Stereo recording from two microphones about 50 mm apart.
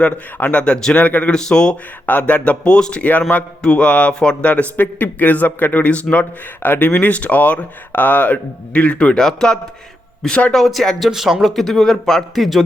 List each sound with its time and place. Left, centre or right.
0.5 s speech: left
0.9 s a man's voice: left
1.3 s speech: centre
2.0 s speech: left
3.0 s a man's voice: left
3.6 s speech: centre